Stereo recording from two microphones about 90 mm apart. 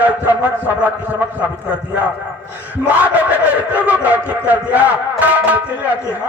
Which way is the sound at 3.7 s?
15° right (ahead or behind).